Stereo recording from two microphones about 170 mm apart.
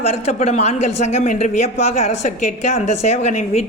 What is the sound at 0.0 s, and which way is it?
A woman's voice, 40° left (ahead or behind).